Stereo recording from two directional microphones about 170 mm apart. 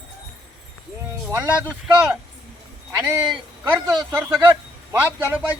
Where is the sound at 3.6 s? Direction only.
15° right (ahead or behind).